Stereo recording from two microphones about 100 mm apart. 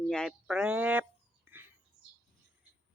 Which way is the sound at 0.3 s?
5° right (ahead or behind).